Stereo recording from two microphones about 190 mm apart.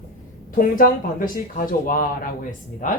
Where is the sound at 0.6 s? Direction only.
45° left (ahead or behind).